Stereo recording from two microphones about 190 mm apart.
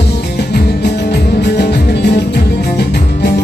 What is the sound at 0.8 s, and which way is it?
Music, 60° left (ahead or behind).